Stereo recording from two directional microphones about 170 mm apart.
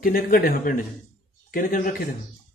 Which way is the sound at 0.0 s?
55° left (ahead or behind).